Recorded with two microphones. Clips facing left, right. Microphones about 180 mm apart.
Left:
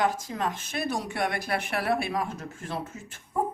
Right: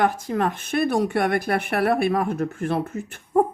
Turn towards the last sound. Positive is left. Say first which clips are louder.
# right 10 dB
turn(degrees=-60)  # may be behind; listen again after turning